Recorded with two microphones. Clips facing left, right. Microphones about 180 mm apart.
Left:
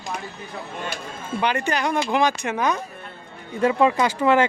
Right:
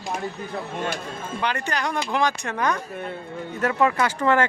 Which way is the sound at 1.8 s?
5° left (ahead or behind).